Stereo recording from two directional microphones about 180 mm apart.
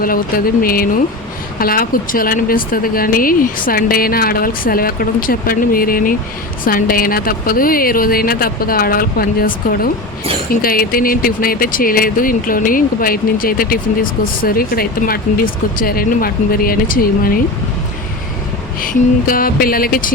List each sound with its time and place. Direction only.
0.0 s speech: 55° left (ahead or behind)
19.3 s speech: 55° left (ahead or behind)